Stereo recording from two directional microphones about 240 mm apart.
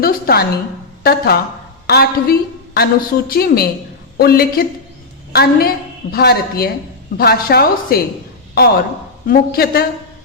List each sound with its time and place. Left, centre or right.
0.0 s a woman's voice: left
9.2 s a woman's voice: left